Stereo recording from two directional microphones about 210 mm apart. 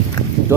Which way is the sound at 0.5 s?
10° right (ahead or behind).